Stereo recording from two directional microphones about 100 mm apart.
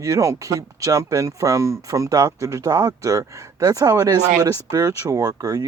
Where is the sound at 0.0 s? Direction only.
30° right (ahead or behind).